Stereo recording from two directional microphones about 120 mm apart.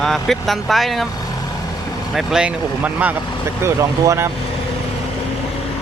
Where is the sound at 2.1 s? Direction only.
5° right (ahead or behind).